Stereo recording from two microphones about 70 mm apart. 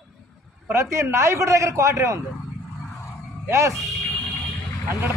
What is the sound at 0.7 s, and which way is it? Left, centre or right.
A man's voice, right.